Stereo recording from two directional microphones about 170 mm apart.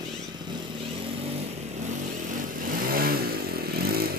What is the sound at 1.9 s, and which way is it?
Vehicle, 50° right (ahead or behind).